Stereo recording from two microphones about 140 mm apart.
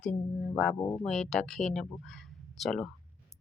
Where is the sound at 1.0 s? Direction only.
5° left (ahead or behind).